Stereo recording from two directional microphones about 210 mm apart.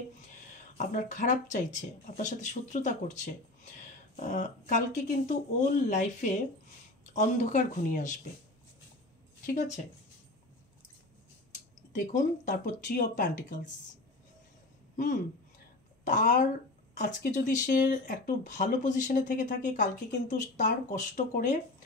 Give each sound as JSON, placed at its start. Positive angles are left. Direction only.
{"t": 0.7, "sound": "speech", "side_deg": 35}
{"t": 11.9, "sound": "speech", "side_deg": 35}
{"t": 15.0, "sound": "speech", "side_deg": 40}